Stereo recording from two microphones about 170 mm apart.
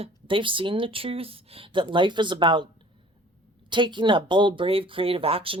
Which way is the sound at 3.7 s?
30° right (ahead or behind).